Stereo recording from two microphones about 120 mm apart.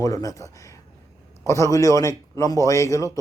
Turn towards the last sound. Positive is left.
turn(degrees=25)  # may be behind; listen again after turning